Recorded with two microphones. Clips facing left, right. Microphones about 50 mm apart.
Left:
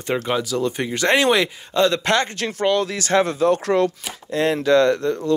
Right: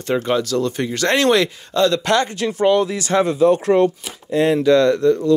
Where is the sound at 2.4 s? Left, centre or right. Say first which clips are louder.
Right 4 dB; left.